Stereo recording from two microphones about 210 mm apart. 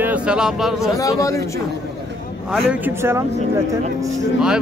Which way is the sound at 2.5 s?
5° right (ahead or behind).